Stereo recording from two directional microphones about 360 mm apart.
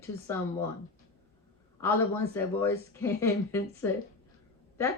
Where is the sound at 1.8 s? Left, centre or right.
Centre.